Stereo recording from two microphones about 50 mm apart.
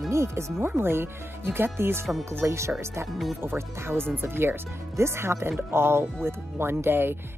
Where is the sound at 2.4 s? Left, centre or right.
Right.